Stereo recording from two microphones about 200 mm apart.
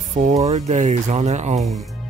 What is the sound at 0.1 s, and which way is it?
Speech, 35° right (ahead or behind).